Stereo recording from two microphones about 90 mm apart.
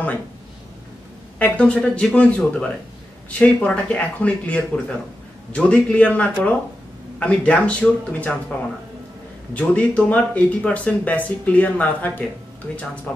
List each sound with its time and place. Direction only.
1.4 s speech: 10° left (ahead or behind)